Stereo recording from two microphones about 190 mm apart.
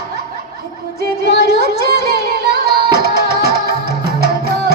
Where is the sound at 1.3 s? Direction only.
60° right (ahead or behind).